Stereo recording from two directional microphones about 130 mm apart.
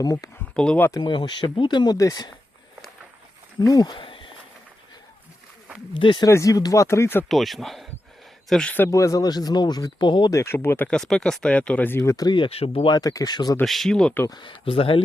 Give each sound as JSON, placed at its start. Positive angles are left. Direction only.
{"t": 0.0, "sound": "speech", "side_deg": 25}
{"t": 0.5, "sound": "speech", "side_deg": 10}
{"t": 0.9, "sound": "speech", "side_deg": 25}
{"t": 3.6, "sound": "speech", "side_deg": 30}
{"t": 5.9, "sound": "speech", "side_deg": 40}
{"t": 6.2, "sound": "speech", "side_deg": 25}
{"t": 7.3, "sound": "speech", "side_deg": 0}
{"t": 8.7, "sound": "speech", "side_deg": 20}
{"t": 10.3, "sound": "speech", "side_deg": 20}
{"t": 12.5, "sound": "speech", "side_deg": 50}
{"t": 12.9, "sound": "speech", "side_deg": 30}
{"t": 13.7, "sound": "speech", "side_deg": 0}
{"t": 14.3, "sound": "speech", "side_deg": 35}